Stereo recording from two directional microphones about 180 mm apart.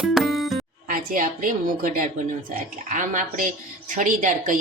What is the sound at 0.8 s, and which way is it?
A woman's voice, 50° right (ahead or behind).